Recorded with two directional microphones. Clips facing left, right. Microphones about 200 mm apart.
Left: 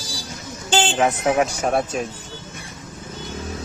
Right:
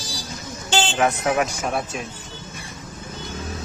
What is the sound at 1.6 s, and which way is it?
Speech, 40° left (ahead or behind).